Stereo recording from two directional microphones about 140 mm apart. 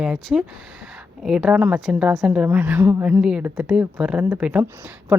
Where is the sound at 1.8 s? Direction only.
Centre (ahead or behind).